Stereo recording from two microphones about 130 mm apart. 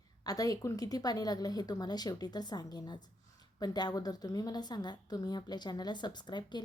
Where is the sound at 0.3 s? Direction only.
30° left (ahead or behind).